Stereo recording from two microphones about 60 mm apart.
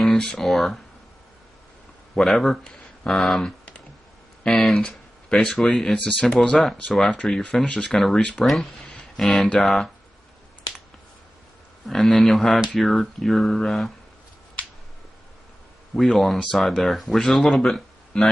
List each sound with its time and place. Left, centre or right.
0.0 s speech: centre
2.2 s speech: centre
9.1 s speech: centre
11.9 s speech: centre
16.0 s speech: centre
18.1 s speech: centre